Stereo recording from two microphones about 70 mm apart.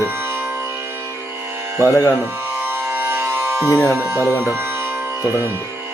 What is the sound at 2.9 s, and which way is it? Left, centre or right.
Music, right.